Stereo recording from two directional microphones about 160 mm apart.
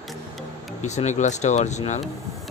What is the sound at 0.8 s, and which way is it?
Speech, 45° left (ahead or behind).